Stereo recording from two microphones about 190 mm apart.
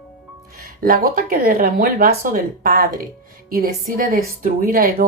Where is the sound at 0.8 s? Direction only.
50° right (ahead or behind).